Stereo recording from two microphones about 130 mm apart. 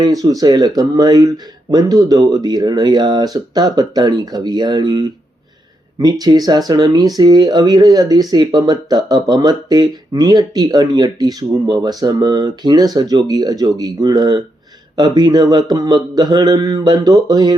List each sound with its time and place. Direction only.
0.0 s speech: 30° right (ahead or behind)